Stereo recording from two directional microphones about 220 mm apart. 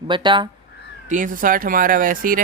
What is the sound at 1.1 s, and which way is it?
Speech, 35° right (ahead or behind).